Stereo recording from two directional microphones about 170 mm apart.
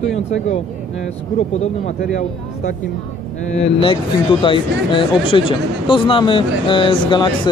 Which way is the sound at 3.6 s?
30° left (ahead or behind).